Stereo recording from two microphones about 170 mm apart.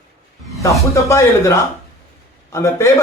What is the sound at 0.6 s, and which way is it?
A man's voice, 15° left (ahead or behind).